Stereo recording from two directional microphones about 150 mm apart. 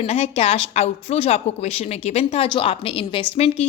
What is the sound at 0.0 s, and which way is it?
A woman's voice, 40° left (ahead or behind).